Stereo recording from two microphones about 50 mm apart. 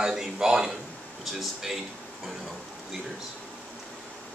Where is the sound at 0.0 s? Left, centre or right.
Centre.